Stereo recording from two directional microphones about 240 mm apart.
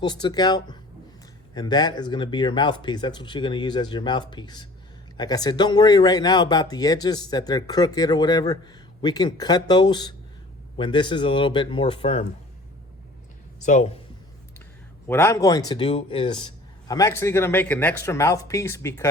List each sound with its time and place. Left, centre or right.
0.0 s speech: centre
13.6 s speech: left
15.0 s speech: centre